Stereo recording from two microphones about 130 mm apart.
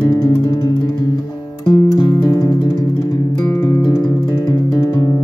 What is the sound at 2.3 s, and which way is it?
Music, 25° left (ahead or behind).